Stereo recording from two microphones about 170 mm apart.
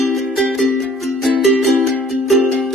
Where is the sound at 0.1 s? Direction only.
Centre (ahead or behind).